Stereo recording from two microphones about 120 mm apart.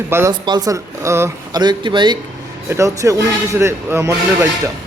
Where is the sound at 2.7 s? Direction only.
25° right (ahead or behind).